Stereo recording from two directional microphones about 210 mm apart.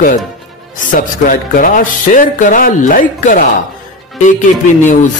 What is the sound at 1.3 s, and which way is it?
A man's voice, 40° left (ahead or behind).